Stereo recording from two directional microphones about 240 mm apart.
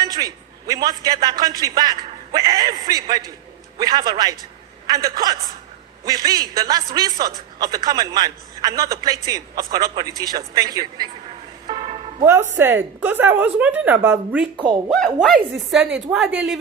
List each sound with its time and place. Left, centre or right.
0.0 s a man's voice: centre
11.7 s music: right
12.2 s a man's voice: centre
14.5 s a man's voice: centre
14.8 s speech: centre